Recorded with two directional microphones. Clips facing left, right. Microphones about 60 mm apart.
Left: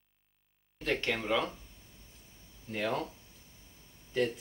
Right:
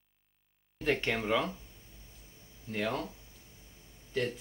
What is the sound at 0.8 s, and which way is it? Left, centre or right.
Speech, centre.